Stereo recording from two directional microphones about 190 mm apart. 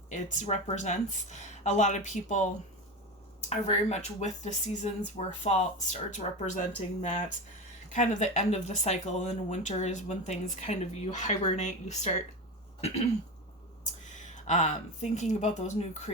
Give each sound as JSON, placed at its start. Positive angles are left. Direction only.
{"t": 0.1, "sound": "speech", "side_deg": 40}
{"t": 3.5, "sound": "speech", "side_deg": 35}
{"t": 12.8, "sound": "throat clearing", "side_deg": 35}
{"t": 14.0, "sound": "speech", "side_deg": 40}